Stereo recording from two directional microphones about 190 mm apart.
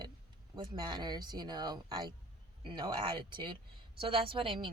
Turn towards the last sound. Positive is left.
turn(degrees=-25)  # may be behind; listen again after turning